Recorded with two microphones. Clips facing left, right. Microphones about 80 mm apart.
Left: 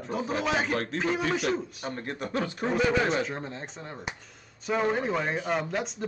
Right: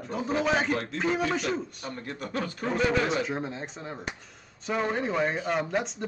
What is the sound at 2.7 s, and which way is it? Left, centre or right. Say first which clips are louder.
Speech: even; centre.